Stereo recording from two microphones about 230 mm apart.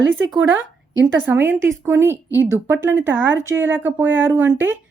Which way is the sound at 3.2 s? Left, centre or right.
Right.